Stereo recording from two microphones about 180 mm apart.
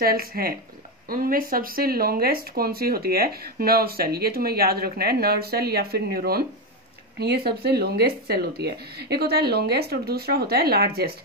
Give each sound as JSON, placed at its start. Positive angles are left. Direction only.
{"t": 0.0, "sound": "speech", "side_deg": -55}